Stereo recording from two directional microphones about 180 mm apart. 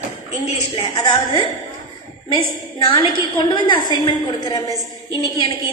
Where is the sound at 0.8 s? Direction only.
25° left (ahead or behind).